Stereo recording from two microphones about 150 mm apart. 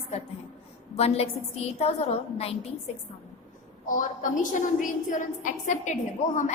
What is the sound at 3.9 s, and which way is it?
A woman's voice, 60° left (ahead or behind).